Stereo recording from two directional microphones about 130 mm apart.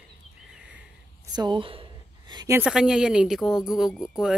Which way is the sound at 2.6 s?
5° right (ahead or behind).